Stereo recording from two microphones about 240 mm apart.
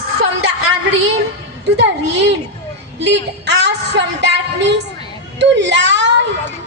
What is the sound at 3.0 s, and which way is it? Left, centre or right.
Child singing, right.